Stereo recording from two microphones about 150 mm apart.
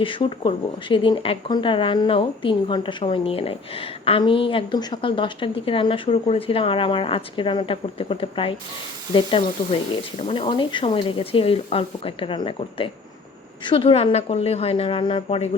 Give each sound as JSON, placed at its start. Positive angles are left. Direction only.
{"t": 0.0, "sound": "speech", "side_deg": 35}
{"t": 9.9, "sound": "speech", "side_deg": 40}